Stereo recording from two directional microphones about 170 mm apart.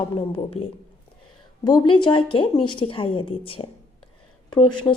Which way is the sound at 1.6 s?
25° left (ahead or behind).